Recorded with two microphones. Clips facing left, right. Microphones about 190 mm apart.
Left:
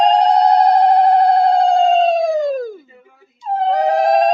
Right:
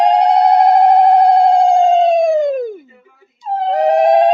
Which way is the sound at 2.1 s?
50° right (ahead or behind).